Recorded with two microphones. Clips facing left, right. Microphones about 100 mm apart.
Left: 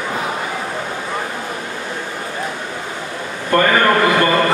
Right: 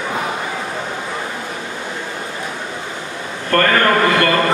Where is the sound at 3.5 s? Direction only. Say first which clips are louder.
Left 1 dB; 10° left (ahead or behind).